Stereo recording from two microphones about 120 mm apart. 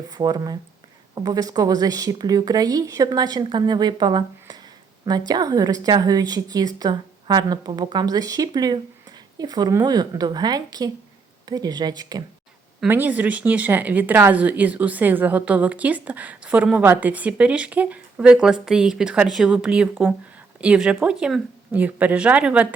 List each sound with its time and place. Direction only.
0.1 s a woman's voice: 35° right (ahead or behind)
12.9 s speech: 15° right (ahead or behind)